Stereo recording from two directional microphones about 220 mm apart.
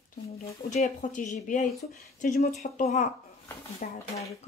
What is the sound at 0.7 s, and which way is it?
A woman's voice, 35° left (ahead or behind).